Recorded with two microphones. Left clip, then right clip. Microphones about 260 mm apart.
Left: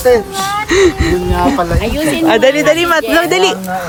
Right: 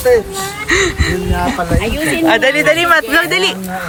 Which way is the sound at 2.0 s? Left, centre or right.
Centre.